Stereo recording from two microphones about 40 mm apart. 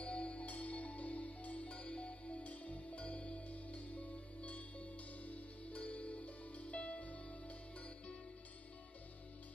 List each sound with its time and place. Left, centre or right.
0.0 s music: left